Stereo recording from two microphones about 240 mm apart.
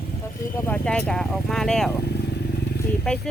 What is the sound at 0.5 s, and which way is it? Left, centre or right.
Speech, centre.